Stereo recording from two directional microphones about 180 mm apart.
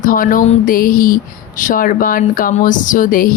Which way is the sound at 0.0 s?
50° left (ahead or behind).